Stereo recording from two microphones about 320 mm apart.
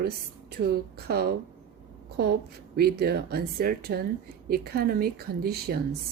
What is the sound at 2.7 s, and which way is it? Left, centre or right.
A woman's voice, right.